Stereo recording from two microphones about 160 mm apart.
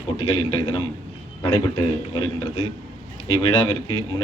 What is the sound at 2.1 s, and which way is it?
A man's voice, 25° left (ahead or behind).